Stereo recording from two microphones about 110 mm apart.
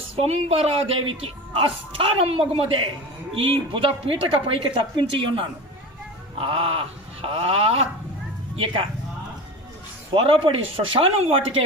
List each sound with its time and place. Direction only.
0.2 s speech: 70° right (ahead or behind)
8.5 s speech: 50° right (ahead or behind)
10.2 s speech: 55° right (ahead or behind)